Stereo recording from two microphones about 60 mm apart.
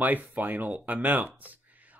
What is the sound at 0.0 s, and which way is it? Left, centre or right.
Speech, right.